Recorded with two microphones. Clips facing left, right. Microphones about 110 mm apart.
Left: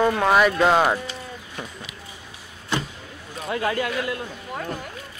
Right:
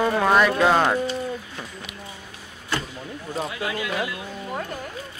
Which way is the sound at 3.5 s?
50° left (ahead or behind).